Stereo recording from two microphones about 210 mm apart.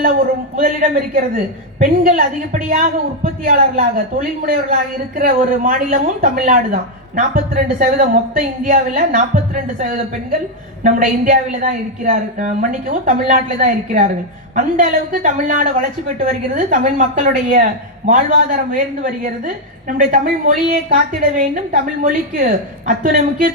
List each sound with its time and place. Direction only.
0.0 s a woman's voice: 40° right (ahead or behind)
20.0 s a woman's voice: 40° right (ahead or behind)